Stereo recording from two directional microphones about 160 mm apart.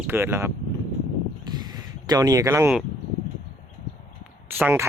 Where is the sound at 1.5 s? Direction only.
25° right (ahead or behind).